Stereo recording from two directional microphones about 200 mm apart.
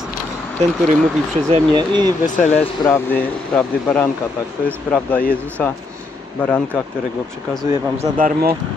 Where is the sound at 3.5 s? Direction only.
5° left (ahead or behind).